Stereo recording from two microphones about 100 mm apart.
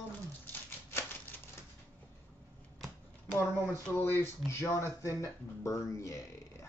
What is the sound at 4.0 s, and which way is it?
Speech, 20° left (ahead or behind).